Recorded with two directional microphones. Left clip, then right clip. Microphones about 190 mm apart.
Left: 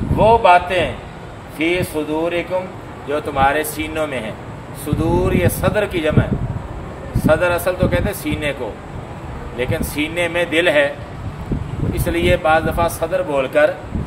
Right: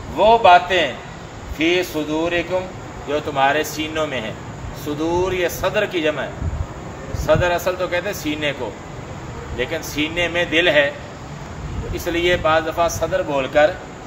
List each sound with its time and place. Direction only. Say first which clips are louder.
0.2 s a man's voice: even; 15° left (ahead or behind)
7.2 s speech: left 2 dB; 25° left (ahead or behind)
9.6 s speech: left 1 dB; 25° left (ahead or behind)
12.0 s speech: left 1 dB; 25° left (ahead or behind)